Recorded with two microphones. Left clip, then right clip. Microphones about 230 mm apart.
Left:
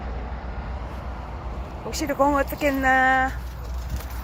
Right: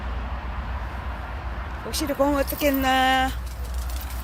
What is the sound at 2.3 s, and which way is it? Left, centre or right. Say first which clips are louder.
Speech: left 1 dB; right.